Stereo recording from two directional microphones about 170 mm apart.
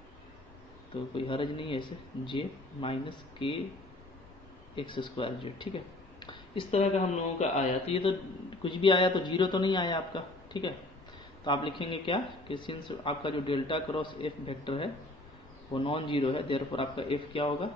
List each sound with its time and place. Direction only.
1.1 s a man's voice: 30° left (ahead or behind)
4.7 s a man's voice: 30° left (ahead or behind)
6.1 s a sound: 30° left (ahead or behind)
7.3 s a man's voice: 40° left (ahead or behind)